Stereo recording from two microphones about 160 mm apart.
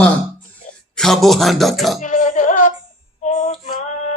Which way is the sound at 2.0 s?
50° left (ahead or behind).